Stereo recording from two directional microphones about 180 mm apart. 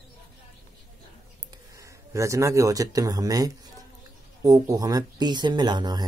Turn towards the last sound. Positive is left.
turn(degrees=-25)  # may be behind; listen again after turning